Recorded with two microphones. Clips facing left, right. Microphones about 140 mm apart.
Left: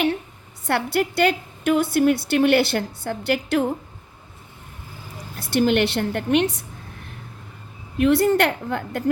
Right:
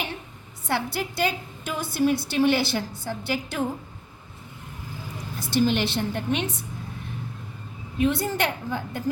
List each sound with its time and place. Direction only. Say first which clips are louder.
0.7 s a woman's voice: left 6 dB; 70° left (ahead or behind)
5.5 s a woman's voice: left 4 dB; 65° left (ahead or behind)
7.9 s a woman's voice: left 7 dB; 70° left (ahead or behind)